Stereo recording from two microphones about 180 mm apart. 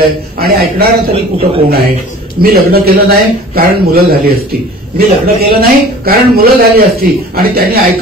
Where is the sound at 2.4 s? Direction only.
55° right (ahead or behind).